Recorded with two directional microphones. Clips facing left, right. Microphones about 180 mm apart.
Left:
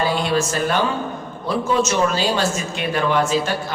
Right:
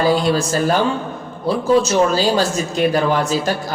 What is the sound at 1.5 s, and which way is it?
A man's voice, 35° right (ahead or behind).